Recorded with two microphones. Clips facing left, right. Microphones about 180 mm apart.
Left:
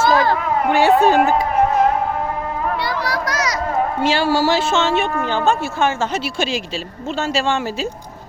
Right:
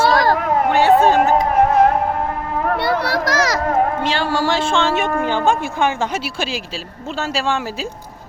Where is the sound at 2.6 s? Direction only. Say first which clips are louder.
Right 5 dB; 55° right (ahead or behind).